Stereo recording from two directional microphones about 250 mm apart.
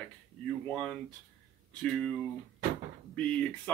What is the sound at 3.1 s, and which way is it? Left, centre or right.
Speech, centre.